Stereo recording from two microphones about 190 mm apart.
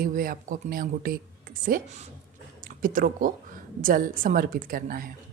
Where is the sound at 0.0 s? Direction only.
50° right (ahead or behind).